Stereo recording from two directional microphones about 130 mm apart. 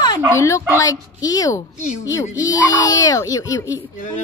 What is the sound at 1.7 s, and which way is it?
Speech, 65° left (ahead or behind).